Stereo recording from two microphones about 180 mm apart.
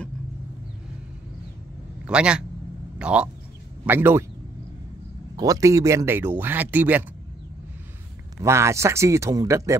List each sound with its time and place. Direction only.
2.0 s a man's voice: 5° right (ahead or behind)
5.3 s speech: 20° right (ahead or behind)
8.4 s speech: 15° right (ahead or behind)